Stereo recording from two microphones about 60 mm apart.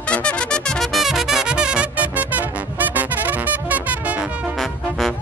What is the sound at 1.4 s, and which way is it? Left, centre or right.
Music, centre.